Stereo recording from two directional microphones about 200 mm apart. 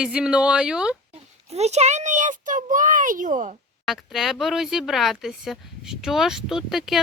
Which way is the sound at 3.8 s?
Centre (ahead or behind).